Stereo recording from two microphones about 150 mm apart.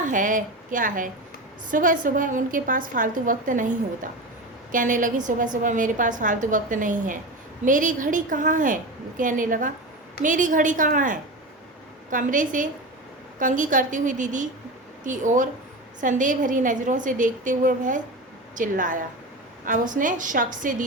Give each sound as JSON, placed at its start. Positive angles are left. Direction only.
{"t": 0.0, "sound": "a woman's voice", "side_deg": -60}